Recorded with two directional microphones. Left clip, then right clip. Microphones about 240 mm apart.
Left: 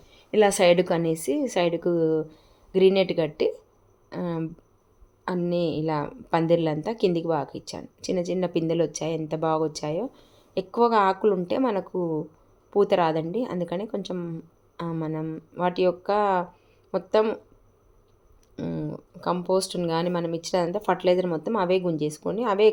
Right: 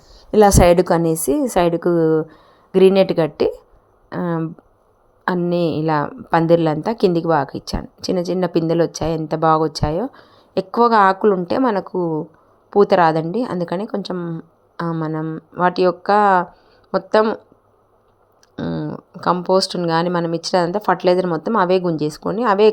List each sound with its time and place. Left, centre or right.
0.3 s a woman's voice: right
18.5 s a woman's voice: centre